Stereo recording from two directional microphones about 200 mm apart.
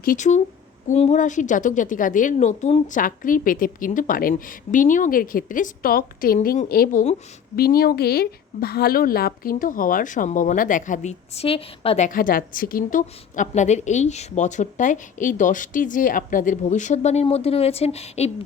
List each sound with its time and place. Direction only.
0.0 s a woman's voice: 40° left (ahead or behind)